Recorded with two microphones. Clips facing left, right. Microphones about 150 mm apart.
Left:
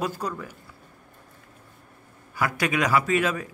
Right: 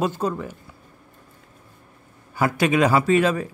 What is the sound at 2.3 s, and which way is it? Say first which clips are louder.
Speech: right 6 dB; 25° right (ahead or behind).